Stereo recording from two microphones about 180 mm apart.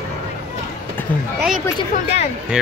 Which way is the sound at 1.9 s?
35° left (ahead or behind).